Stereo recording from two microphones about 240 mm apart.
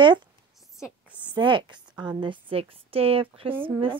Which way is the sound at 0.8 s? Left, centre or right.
Centre.